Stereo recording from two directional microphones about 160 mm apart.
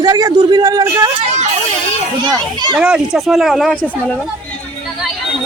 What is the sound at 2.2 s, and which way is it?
Speech, 25° right (ahead or behind).